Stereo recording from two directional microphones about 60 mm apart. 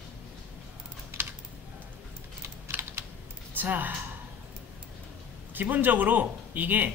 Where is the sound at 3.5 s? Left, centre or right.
Right.